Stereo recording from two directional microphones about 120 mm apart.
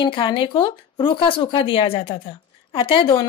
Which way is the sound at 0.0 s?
45° left (ahead or behind).